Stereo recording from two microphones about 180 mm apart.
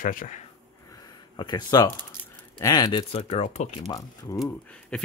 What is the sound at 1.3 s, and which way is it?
Speech, 25° left (ahead or behind).